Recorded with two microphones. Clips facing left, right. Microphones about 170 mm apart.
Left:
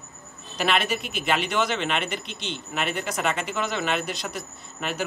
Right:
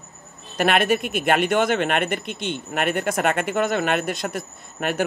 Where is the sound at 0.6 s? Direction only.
50° right (ahead or behind).